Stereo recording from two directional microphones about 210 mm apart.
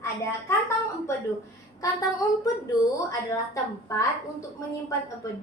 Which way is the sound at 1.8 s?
15° left (ahead or behind).